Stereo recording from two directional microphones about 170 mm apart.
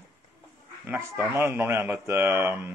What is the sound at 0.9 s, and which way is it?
Speech, 15° right (ahead or behind).